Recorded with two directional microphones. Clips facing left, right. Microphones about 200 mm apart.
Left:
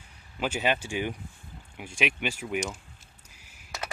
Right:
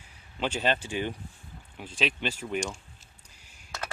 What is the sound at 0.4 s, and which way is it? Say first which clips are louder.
Speech: even; 10° left (ahead or behind).